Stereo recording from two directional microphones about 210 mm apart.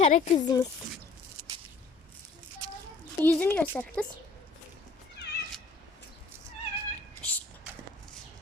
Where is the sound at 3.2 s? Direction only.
10° left (ahead or behind).